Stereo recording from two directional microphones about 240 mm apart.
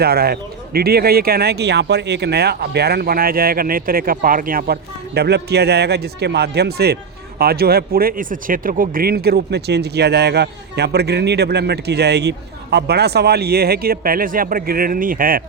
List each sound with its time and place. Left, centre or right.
0.0 s speech: right